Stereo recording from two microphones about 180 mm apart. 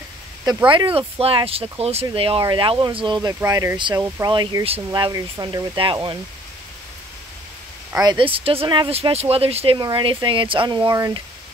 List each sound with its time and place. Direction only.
0.7 s speech: 30° right (ahead or behind)
8.0 s speech: 25° right (ahead or behind)